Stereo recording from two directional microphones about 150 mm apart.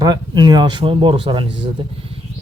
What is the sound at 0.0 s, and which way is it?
Speech, 25° right (ahead or behind).